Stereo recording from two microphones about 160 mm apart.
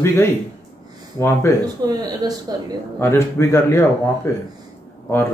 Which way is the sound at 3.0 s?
15° left (ahead or behind).